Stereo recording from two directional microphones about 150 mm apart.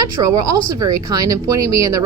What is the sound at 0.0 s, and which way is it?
A woman's voice, 25° right (ahead or behind).